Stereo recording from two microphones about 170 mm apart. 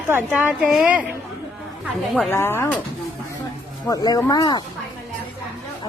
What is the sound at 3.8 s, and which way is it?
Speech, 20° left (ahead or behind).